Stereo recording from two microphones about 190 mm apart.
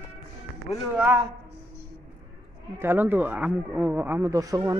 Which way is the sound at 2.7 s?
10° right (ahead or behind).